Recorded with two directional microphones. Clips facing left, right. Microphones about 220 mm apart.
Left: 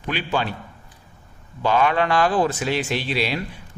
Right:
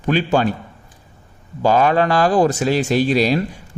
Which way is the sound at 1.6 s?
40° right (ahead or behind).